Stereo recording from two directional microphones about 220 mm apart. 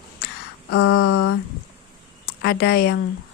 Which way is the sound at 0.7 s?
90° left.